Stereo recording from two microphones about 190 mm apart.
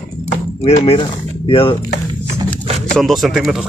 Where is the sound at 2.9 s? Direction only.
Centre (ahead or behind).